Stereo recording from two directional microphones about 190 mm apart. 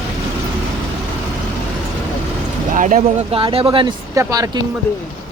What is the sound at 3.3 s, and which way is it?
Speech, 30° right (ahead or behind).